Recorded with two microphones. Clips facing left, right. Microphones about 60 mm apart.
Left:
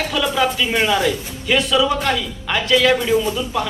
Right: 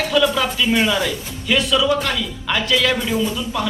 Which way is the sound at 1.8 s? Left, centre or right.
Left.